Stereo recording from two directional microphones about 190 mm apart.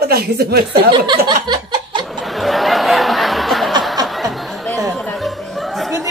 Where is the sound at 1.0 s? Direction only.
25° right (ahead or behind).